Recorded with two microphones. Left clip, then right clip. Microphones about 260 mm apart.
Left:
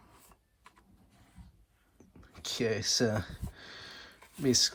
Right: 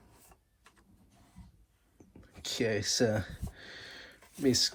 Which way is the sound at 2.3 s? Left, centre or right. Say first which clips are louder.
Even; left.